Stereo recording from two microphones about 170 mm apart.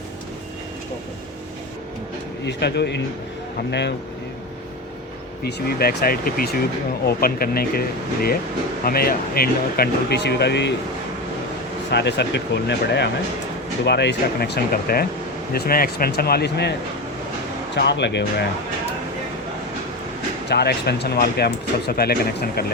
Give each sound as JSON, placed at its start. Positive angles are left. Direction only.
{"t": 2.5, "sound": "speech", "side_deg": 80}
{"t": 5.4, "sound": "speech", "side_deg": 70}
{"t": 11.9, "sound": "speech", "side_deg": 90}
{"t": 17.7, "sound": "speech", "side_deg": 90}
{"t": 20.5, "sound": "speech", "side_deg": 70}